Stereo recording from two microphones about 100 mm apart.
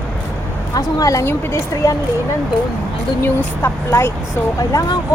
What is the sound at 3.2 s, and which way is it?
Speech, 25° left (ahead or behind).